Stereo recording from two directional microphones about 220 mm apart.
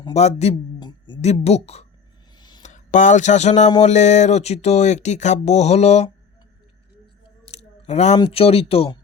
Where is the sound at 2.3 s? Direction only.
20° left (ahead or behind).